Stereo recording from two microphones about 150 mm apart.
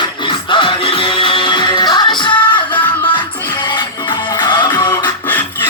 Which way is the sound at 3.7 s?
30° left (ahead or behind).